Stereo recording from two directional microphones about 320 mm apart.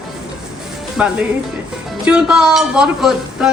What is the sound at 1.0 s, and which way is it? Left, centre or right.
Speech, centre.